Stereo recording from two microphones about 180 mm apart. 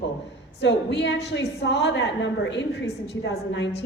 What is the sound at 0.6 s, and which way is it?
A woman's voice, 75° left (ahead or behind).